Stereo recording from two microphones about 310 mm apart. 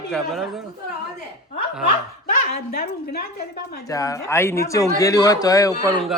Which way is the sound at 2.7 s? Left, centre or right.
Left.